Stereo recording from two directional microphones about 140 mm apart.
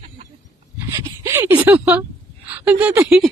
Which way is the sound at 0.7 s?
20° right (ahead or behind).